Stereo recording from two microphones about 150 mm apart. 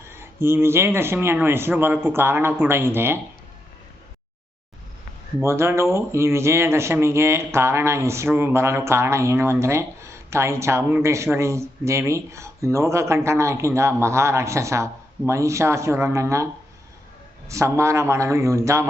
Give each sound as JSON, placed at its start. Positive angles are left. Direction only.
{"t": 0.0, "sound": "speech", "side_deg": -15}
{"t": 5.4, "sound": "speech", "side_deg": -15}
{"t": 17.5, "sound": "speech", "side_deg": -20}